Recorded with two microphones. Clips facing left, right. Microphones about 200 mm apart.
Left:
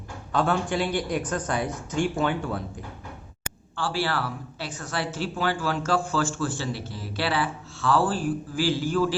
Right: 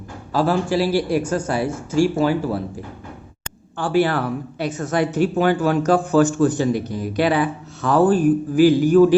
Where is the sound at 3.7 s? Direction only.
20° right (ahead or behind).